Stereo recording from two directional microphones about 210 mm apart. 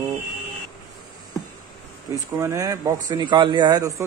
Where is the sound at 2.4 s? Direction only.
15° right (ahead or behind).